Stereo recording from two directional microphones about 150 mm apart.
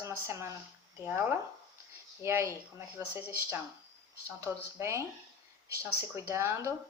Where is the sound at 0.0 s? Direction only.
20° right (ahead or behind).